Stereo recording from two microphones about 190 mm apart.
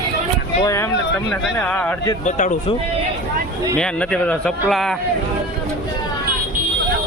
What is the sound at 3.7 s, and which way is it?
Speech, 5° left (ahead or behind).